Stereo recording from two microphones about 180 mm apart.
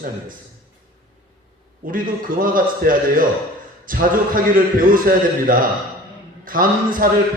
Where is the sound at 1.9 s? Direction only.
50° right (ahead or behind).